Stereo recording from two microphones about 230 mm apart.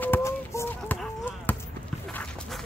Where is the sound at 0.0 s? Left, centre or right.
Centre.